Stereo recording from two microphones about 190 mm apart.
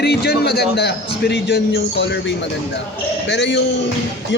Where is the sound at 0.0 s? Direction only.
60° left (ahead or behind).